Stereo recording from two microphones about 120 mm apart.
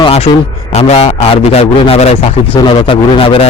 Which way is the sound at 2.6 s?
40° left (ahead or behind).